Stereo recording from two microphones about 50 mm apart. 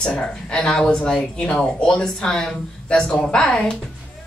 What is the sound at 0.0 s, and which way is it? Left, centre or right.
Speech, centre.